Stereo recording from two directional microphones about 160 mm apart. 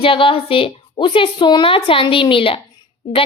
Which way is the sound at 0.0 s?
35° left (ahead or behind).